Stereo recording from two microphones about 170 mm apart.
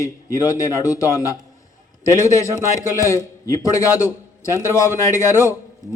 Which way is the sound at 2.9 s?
20° left (ahead or behind).